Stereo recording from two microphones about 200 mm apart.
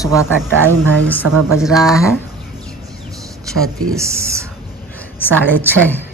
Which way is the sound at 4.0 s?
15° right (ahead or behind).